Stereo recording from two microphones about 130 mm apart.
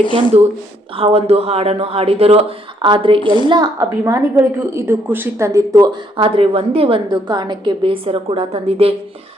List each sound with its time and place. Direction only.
0.9 s a woman's voice: 50° right (ahead or behind)
3.5 s a woman's voice: 30° right (ahead or behind)
6.1 s a woman's voice: 45° right (ahead or behind)